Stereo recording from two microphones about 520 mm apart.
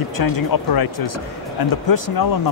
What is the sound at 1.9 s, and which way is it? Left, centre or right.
Speech, left.